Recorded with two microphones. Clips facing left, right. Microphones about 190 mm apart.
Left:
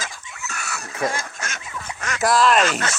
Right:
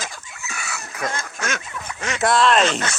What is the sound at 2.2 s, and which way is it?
Speech, centre (ahead or behind).